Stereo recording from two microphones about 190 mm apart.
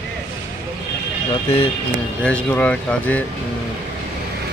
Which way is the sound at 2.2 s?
5° left (ahead or behind).